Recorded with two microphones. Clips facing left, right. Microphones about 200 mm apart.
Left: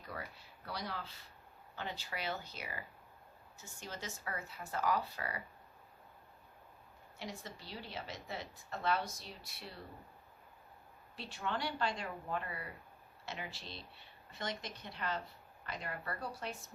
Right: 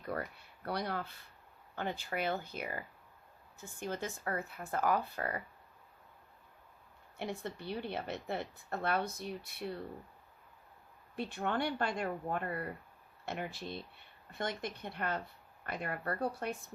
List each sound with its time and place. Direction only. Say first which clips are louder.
0.1 s a sound: right 7 dB; 55° right (ahead or behind)
0.6 s a woman's voice: right 6 dB; 55° right (ahead or behind)
7.2 s a woman's voice: right 7 dB; 60° right (ahead or behind)
11.2 s a woman's voice: right 5 dB; 55° right (ahead or behind)